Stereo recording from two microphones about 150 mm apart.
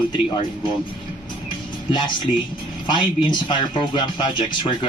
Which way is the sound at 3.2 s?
30° left (ahead or behind).